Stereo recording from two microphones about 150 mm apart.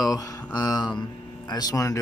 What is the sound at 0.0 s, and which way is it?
Speech, 25° left (ahead or behind).